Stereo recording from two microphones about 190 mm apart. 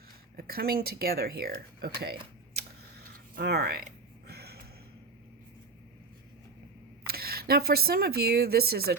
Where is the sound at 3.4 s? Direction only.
60° right (ahead or behind).